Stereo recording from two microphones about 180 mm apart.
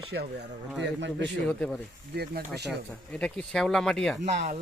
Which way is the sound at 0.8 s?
75° right (ahead or behind).